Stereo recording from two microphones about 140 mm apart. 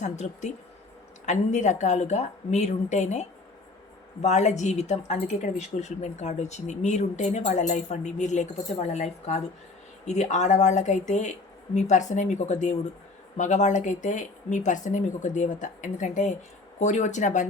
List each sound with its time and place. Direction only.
0.0 s a woman's voice: 55° left (ahead or behind)